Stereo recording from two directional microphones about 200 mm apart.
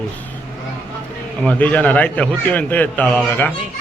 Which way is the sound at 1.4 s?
5° left (ahead or behind).